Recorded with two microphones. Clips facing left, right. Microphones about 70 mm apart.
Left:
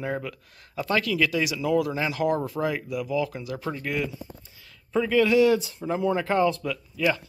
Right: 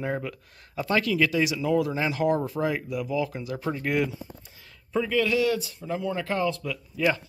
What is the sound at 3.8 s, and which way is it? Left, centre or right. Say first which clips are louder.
Speech: right 4 dB; right.